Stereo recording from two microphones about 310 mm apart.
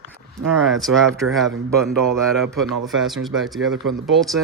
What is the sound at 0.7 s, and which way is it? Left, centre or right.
Speech, centre.